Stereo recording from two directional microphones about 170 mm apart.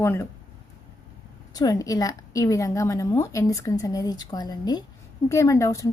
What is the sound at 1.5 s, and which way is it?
A woman's voice, 20° left (ahead or behind).